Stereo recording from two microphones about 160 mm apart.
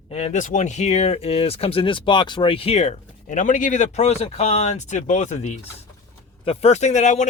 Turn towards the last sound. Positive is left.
turn(degrees=50)  # may be behind; listen again after turning